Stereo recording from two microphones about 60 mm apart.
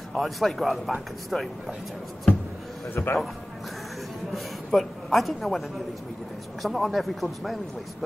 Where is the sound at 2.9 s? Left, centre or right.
Left.